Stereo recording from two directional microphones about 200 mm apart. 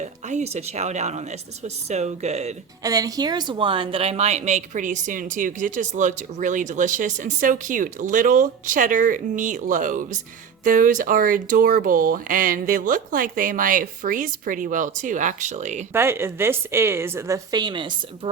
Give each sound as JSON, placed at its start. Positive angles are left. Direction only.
{"t": 0.0, "sound": "speech", "side_deg": -35}
{"t": 2.8, "sound": "speech", "side_deg": -20}
{"t": 15.9, "sound": "speech", "side_deg": -10}